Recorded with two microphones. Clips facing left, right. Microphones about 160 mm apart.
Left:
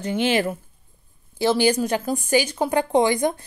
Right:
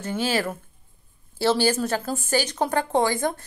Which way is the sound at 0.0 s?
15° left (ahead or behind).